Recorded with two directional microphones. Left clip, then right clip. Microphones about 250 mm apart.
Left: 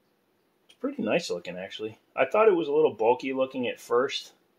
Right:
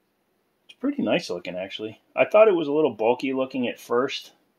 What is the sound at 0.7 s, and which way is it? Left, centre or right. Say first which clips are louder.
Speech: right 3 dB; right.